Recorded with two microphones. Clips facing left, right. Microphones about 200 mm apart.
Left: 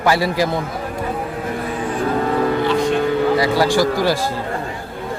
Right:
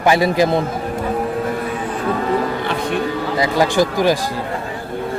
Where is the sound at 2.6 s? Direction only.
55° right (ahead or behind).